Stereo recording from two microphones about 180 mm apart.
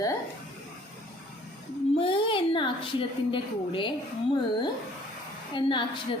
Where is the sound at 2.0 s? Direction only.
30° left (ahead or behind).